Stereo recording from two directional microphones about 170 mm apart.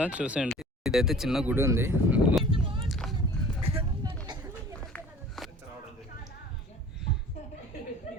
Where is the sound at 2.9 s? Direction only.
Centre (ahead or behind).